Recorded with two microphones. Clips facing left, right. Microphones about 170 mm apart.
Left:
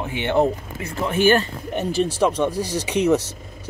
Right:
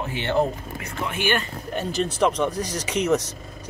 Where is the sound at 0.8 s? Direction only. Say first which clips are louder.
Left 9 dB; 40° left (ahead or behind).